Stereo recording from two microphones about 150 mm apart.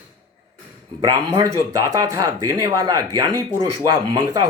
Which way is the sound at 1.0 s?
25° right (ahead or behind).